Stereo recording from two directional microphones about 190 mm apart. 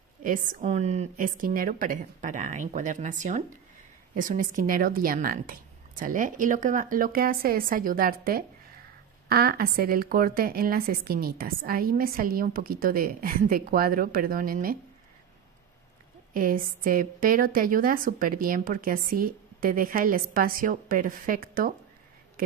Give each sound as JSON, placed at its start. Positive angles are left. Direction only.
{"t": 0.2, "sound": "a woman's voice", "side_deg": -45}
{"t": 16.3, "sound": "a woman's voice", "side_deg": -45}